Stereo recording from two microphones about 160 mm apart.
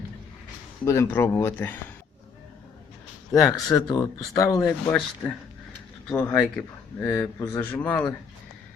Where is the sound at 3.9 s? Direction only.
20° left (ahead or behind).